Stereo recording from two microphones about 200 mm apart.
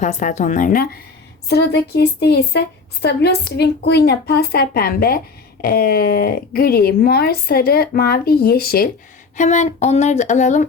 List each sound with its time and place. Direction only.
0.0 s speech: 40° left (ahead or behind)
1.5 s a woman's voice: 55° left (ahead or behind)
9.3 s speech: 35° left (ahead or behind)